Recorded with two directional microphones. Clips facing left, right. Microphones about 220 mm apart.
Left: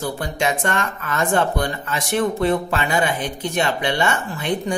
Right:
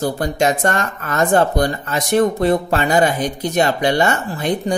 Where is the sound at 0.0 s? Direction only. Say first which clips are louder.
Right 5 dB; 40° right (ahead or behind).